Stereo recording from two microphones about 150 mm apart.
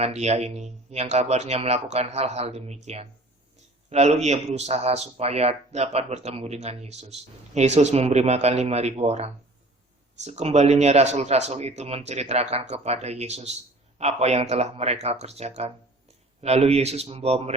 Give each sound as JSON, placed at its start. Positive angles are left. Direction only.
{"t": 0.0, "sound": "a man's voice", "side_deg": -45}